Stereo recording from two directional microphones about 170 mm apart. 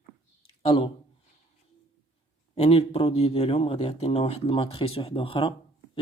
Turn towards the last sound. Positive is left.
turn(degrees=30)  # may be behind; listen again after turning